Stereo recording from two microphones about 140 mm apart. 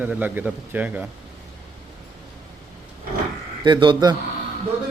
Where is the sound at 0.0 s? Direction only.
10° right (ahead or behind).